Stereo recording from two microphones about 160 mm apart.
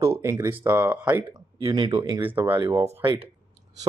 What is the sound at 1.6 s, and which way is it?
Speech, 25° right (ahead or behind).